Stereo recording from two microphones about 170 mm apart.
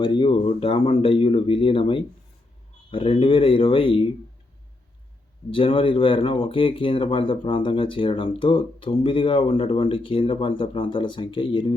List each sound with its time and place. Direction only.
0.0 s speech: 25° left (ahead or behind)
5.5 s speech: 30° left (ahead or behind)